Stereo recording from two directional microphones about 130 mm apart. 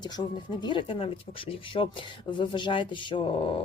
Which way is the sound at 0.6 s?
40° left (ahead or behind).